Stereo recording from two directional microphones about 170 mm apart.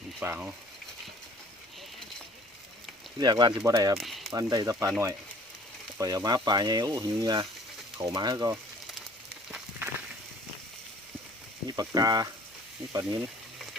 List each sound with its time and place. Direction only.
0.2 s speech: 10° right (ahead or behind)
3.2 s speech: 25° right (ahead or behind)
3.9 s speech: centre (ahead or behind)
4.3 s speech: 20° right (ahead or behind)
11.9 s speech: 25° right (ahead or behind)